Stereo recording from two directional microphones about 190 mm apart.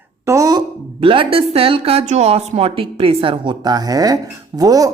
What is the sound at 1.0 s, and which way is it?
Speech, 25° right (ahead or behind).